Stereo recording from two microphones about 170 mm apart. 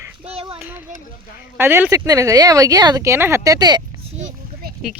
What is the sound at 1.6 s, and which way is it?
Speech, 15° right (ahead or behind).